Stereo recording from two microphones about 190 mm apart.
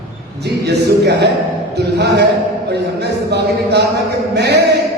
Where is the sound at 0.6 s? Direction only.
60° right (ahead or behind).